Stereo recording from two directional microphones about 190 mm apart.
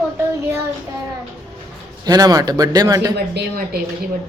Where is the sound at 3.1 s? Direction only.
60° right (ahead or behind).